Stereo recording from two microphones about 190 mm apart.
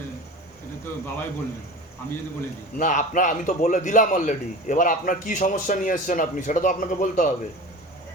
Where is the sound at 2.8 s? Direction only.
40° left (ahead or behind).